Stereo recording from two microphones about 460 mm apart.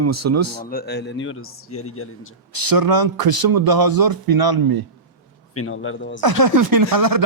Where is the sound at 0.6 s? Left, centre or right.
Centre.